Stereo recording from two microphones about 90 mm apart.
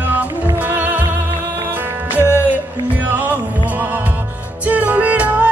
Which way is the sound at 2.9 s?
20° right (ahead or behind).